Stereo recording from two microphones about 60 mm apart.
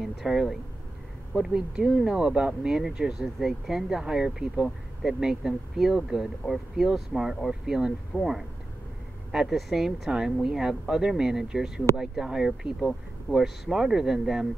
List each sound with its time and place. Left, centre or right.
0.0 s speech: centre
8.1 s speech: centre
9.3 s speech: centre